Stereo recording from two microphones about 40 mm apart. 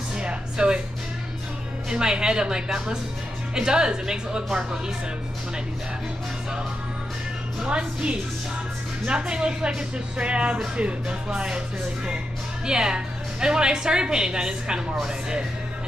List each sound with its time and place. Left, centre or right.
0.2 s music: right
1.9 s speech: centre
7.7 s speech: right
12.6 s speech: centre